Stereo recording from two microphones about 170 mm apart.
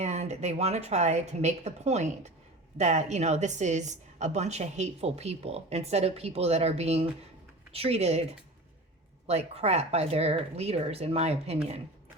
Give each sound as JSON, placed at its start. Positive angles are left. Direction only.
{"t": 0.0, "sound": "a woman's voice", "side_deg": -40}
{"t": 9.2, "sound": "a woman's voice", "side_deg": -40}